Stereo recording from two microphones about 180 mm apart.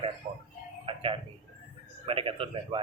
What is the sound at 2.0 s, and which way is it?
Speech, 30° right (ahead or behind).